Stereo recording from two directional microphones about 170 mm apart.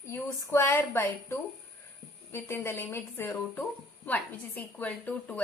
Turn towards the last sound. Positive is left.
turn(degrees=5)  # may be behind; listen again after turning